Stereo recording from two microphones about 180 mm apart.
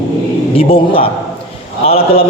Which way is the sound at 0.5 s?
30° left (ahead or behind).